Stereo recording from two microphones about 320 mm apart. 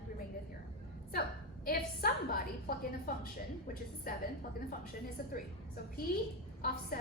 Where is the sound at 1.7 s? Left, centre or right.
Left.